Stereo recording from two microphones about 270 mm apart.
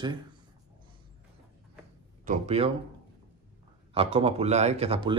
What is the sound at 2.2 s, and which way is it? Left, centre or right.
Speech, right.